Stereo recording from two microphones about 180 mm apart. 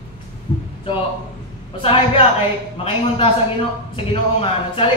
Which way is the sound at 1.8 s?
30° left (ahead or behind).